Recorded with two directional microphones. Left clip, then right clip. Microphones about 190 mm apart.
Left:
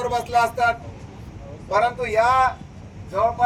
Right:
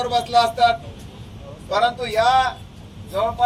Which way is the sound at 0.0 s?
20° left (ahead or behind).